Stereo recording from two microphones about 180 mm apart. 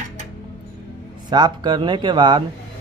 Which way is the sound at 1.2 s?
25° right (ahead or behind).